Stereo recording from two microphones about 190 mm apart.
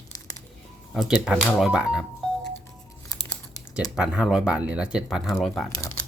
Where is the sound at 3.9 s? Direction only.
5° right (ahead or behind).